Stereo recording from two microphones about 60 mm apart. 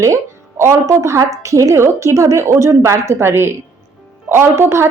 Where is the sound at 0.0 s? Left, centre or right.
Right.